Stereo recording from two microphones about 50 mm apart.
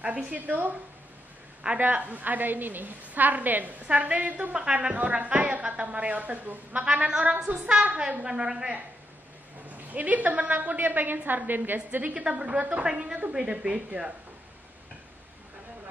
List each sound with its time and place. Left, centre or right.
0.0 s a woman's voice: right
1.8 s a woman's voice: right; by 8.7 s centre
9.8 s a woman's voice: right
12.0 s a woman's voice: right